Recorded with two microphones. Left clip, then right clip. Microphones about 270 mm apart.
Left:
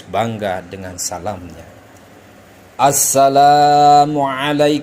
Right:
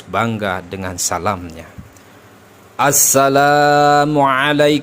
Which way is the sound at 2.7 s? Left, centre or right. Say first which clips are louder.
Left 1 dB; right.